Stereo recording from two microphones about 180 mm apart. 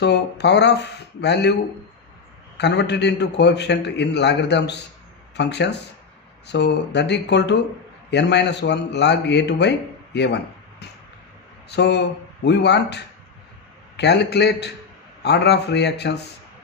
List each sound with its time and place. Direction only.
0.0 s speech: 70° left (ahead or behind)
2.6 s speech: 70° left (ahead or behind)